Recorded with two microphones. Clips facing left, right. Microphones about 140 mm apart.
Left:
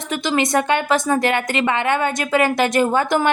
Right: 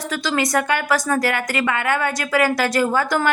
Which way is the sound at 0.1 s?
20° left (ahead or behind).